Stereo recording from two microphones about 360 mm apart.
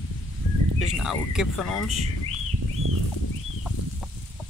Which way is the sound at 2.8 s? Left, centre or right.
Right.